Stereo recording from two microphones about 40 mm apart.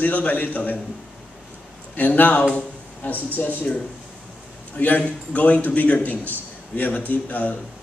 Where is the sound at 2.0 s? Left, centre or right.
Left.